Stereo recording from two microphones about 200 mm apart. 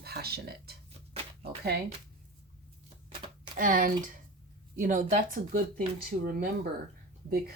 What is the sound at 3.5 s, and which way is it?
Speech, 45° right (ahead or behind).